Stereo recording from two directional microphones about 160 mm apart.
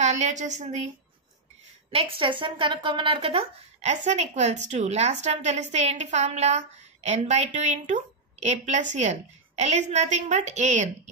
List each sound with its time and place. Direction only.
0.0 s a woman's voice: 45° right (ahead or behind)
1.9 s a woman's voice: 35° right (ahead or behind)